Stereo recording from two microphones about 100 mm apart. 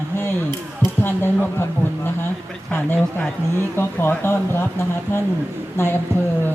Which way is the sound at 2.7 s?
15° left (ahead or behind).